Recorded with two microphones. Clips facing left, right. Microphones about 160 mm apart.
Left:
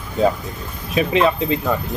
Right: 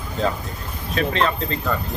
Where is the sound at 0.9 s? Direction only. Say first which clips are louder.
Left 5 dB; 10° left (ahead or behind).